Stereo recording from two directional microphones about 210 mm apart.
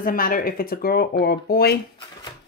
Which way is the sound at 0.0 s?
45° left (ahead or behind).